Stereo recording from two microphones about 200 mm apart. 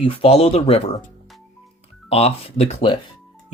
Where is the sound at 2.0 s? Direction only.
30° left (ahead or behind).